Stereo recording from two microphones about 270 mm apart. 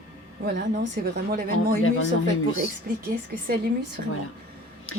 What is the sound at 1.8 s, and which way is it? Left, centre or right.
Speech, left.